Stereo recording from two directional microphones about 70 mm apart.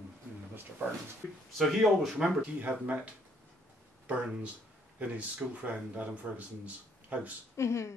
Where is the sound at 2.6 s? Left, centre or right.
Right.